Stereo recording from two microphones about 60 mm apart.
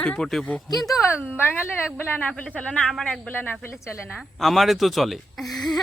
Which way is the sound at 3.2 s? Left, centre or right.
Left.